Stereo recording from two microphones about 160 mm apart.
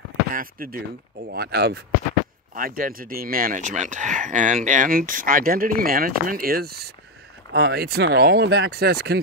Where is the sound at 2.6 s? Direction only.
65° right (ahead or behind).